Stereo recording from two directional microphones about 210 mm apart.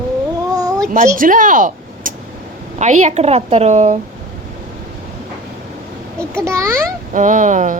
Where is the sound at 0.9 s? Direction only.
35° right (ahead or behind).